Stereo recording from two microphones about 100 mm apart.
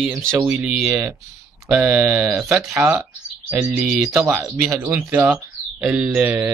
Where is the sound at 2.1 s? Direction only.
30° right (ahead or behind).